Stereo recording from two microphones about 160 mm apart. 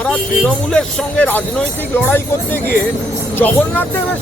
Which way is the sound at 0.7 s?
5° left (ahead or behind).